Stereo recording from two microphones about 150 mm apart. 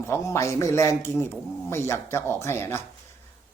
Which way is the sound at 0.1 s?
20° left (ahead or behind).